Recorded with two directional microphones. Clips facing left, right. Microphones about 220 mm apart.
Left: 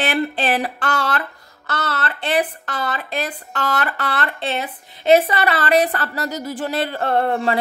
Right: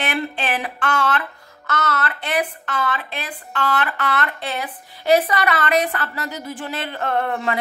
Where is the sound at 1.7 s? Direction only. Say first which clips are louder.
Right 1 dB; 30° left (ahead or behind).